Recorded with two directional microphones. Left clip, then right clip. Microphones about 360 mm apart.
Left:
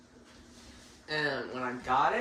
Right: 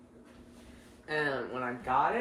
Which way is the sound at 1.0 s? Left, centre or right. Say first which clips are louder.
Even; centre.